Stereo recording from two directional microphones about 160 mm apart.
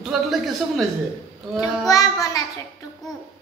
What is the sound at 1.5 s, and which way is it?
Child singing, 20° left (ahead or behind).